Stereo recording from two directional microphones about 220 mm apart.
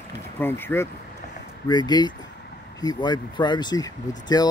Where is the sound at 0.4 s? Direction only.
10° left (ahead or behind).